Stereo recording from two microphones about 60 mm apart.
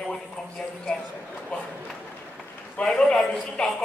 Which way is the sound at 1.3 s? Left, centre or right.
Left.